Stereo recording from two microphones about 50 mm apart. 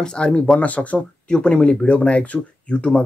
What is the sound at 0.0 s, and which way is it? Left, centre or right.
Speech, centre.